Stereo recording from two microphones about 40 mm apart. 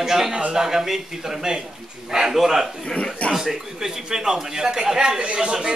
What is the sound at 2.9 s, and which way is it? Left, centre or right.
Speech, left.